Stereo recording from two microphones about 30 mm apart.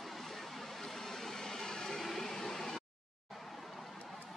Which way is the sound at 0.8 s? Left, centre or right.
Centre.